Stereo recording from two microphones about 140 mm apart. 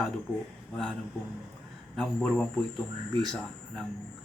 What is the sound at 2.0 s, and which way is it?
Speech, 5° left (ahead or behind).